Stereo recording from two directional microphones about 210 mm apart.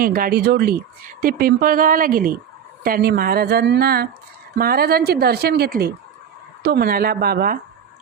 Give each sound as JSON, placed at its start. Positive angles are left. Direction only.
{"t": 0.0, "sound": "speech", "side_deg": -45}